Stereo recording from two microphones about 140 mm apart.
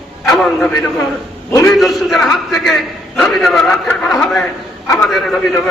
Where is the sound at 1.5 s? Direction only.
20° left (ahead or behind).